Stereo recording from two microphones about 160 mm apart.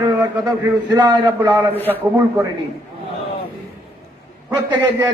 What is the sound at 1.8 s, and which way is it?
Speech, 10° left (ahead or behind).